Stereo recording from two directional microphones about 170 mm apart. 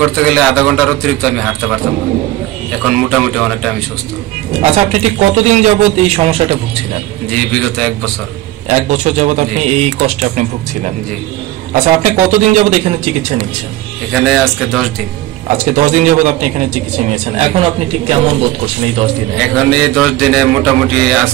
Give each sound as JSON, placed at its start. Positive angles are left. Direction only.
{"t": 0.1, "sound": "a man's voice", "side_deg": 0}
{"t": 2.8, "sound": "a man's voice", "side_deg": 0}
{"t": 4.6, "sound": "speech", "side_deg": -40}
{"t": 7.2, "sound": "a man's voice", "side_deg": 5}
{"t": 8.6, "sound": "speech", "side_deg": -40}
{"t": 11.7, "sound": "a man's voice", "side_deg": -45}
{"t": 14.1, "sound": "a man's voice", "side_deg": 0}
{"t": 15.5, "sound": "speech", "side_deg": -40}
{"t": 19.3, "sound": "a man's voice", "side_deg": 5}